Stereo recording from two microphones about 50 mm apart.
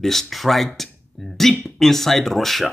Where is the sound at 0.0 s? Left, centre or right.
Centre.